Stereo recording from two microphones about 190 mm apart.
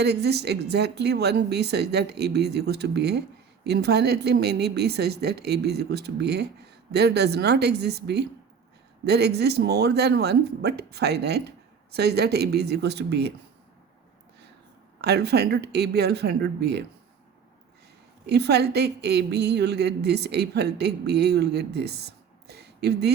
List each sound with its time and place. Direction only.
0.0 s speech: 60° right (ahead or behind)
15.0 s speech: 60° right (ahead or behind)
18.3 s speech: 60° right (ahead or behind)